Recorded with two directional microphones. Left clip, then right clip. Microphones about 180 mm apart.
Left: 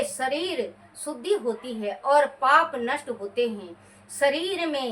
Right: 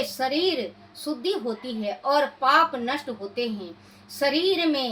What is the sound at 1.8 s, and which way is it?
Speech, 10° left (ahead or behind).